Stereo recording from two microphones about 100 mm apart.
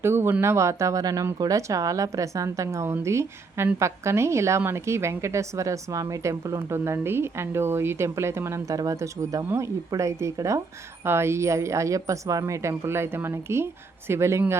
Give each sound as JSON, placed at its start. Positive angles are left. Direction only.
{"t": 0.0, "sound": "a woman's voice", "side_deg": -25}